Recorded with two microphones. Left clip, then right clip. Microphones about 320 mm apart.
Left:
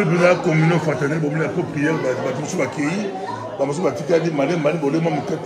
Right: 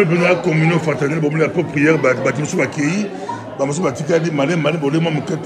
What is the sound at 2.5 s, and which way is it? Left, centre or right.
A man's voice, right.